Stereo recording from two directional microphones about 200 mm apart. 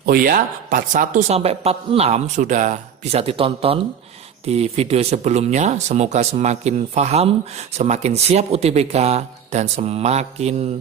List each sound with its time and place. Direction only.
0.0 s speech: 50° right (ahead or behind); by 10.5 s 30° right (ahead or behind)